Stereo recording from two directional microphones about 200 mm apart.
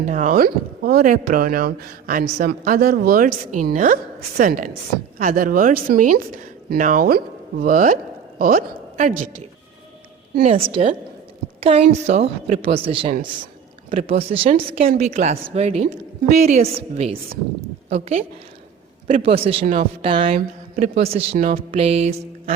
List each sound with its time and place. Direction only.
0.0 s a woman's voice: 40° right (ahead or behind)
10.5 s a woman's voice: 30° right (ahead or behind)
14.3 s a woman's voice: 30° right (ahead or behind)
14.8 s music: 40° right (ahead or behind)
17.8 s a woman's voice: 35° right (ahead or behind)
19.0 s music: 35° right (ahead or behind)
20.0 s a woman's voice: 25° right (ahead or behind)
20.7 s music: 30° right (ahead or behind)
21.3 s speech: 45° right (ahead or behind)
21.7 s music: 30° right (ahead or behind)